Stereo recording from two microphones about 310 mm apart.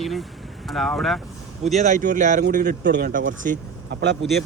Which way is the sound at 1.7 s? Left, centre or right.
Right.